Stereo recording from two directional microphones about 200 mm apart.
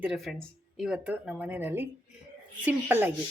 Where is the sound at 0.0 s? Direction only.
5° right (ahead or behind).